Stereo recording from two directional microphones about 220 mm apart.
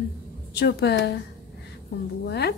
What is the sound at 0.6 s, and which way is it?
Speech, 50° left (ahead or behind).